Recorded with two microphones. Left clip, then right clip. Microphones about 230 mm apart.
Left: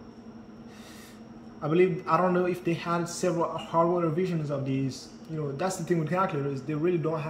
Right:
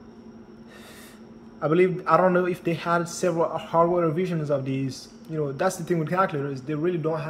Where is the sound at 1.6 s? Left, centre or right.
Centre.